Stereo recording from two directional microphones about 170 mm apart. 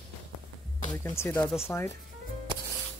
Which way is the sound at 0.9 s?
10° left (ahead or behind).